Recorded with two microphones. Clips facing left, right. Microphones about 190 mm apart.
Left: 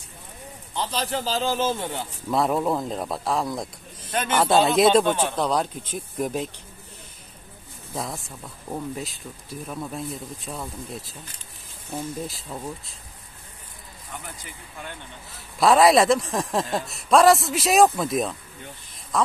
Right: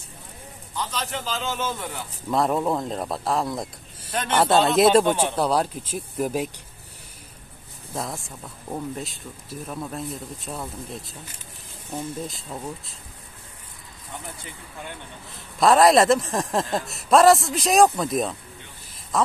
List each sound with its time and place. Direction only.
0.7 s a man's voice: 35° left (ahead or behind)
2.3 s speech: centre (ahead or behind)
7.9 s speech: centre (ahead or behind)
15.3 s speech: centre (ahead or behind)